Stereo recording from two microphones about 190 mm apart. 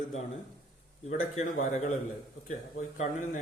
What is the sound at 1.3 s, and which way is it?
Speech, 40° left (ahead or behind).